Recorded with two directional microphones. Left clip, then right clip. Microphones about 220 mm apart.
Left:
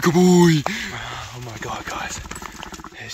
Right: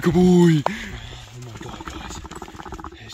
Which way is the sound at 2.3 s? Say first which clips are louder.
Left 1 dB; 25° right (ahead or behind).